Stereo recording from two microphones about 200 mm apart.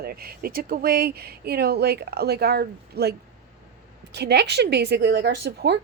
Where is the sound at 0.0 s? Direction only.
50° right (ahead or behind).